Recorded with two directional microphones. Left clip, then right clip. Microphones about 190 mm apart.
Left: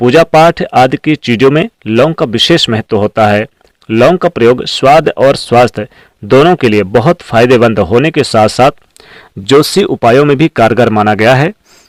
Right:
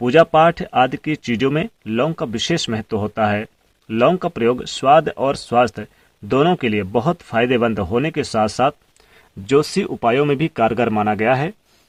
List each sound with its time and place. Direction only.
0.0 s speech: 40° left (ahead or behind)